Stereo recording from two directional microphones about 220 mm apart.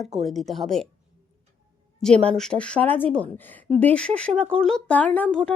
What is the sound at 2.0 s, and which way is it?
Speech, centre (ahead or behind).